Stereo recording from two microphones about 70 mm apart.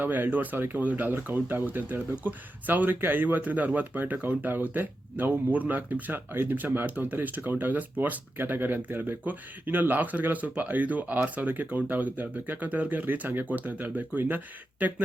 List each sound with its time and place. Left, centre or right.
0.0 s speech: right